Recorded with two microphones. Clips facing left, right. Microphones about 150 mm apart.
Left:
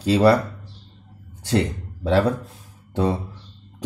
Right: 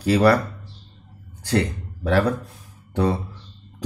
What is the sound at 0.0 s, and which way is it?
Speech, 20° left (ahead or behind).